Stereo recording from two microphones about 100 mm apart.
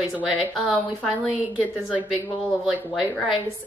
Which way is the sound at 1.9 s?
15° right (ahead or behind).